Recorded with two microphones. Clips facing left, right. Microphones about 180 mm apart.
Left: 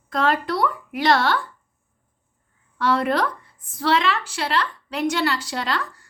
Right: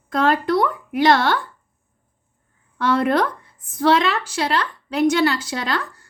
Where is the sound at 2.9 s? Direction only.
50° right (ahead or behind).